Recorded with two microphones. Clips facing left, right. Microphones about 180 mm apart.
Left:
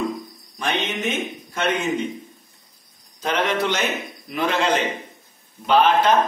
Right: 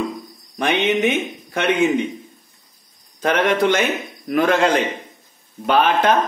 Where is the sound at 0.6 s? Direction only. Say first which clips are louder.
Right 7 dB; 65° right (ahead or behind).